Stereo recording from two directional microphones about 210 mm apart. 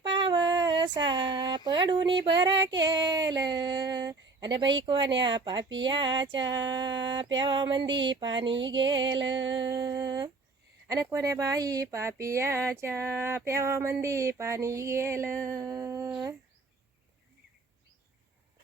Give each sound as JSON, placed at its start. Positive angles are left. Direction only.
{"t": 0.1, "sound": "female singing", "side_deg": -20}
{"t": 5.2, "sound": "speech", "side_deg": -20}
{"t": 9.1, "sound": "music", "side_deg": -60}
{"t": 9.5, "sound": "speech", "side_deg": -20}